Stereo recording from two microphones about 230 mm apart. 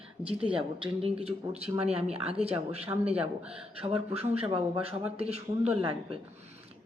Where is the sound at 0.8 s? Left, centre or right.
Right.